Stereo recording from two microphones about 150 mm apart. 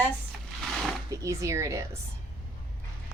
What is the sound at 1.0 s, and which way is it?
Speech, 20° right (ahead or behind).